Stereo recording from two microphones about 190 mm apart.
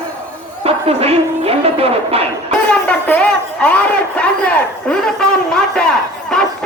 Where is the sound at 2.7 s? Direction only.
5° left (ahead or behind).